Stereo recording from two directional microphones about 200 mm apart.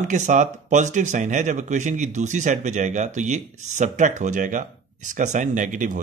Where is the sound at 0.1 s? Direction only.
40° right (ahead or behind).